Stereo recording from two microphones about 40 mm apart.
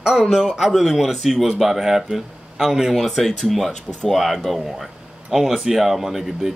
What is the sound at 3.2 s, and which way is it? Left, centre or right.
Speech, centre.